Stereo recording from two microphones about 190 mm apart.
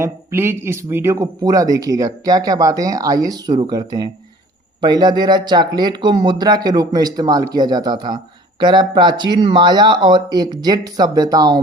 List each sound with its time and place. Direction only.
0.0 s speech: 15° right (ahead or behind)